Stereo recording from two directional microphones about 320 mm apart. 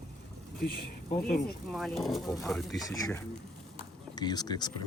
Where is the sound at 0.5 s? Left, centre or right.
Left.